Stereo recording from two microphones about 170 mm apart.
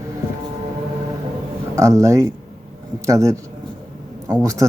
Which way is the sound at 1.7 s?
20° right (ahead or behind).